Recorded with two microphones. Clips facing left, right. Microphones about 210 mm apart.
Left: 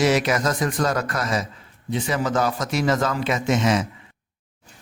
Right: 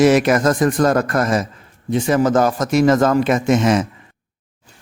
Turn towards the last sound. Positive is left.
turn(degrees=-50)  # may be behind; listen again after turning